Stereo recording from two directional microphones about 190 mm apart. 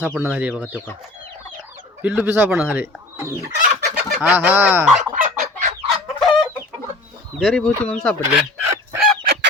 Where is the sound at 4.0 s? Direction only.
10° right (ahead or behind).